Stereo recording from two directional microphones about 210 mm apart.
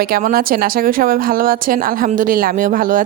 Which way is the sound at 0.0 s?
45° right (ahead or behind).